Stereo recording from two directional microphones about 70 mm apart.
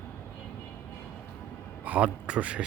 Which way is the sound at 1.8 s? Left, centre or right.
Centre.